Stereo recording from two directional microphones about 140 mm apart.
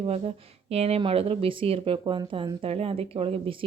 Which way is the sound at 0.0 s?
45° right (ahead or behind).